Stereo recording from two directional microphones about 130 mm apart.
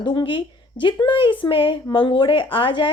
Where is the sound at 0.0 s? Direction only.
40° left (ahead or behind).